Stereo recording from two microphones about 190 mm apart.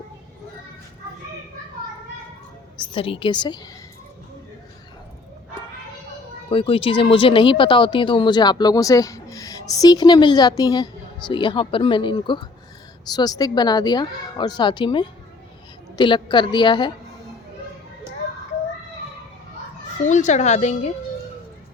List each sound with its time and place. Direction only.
2.7 s a woman's voice: 30° left (ahead or behind)
6.5 s speech: 30° left (ahead or behind)
20.1 s speech: 40° left (ahead or behind)